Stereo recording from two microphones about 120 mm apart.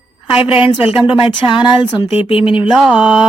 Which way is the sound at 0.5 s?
50° left (ahead or behind).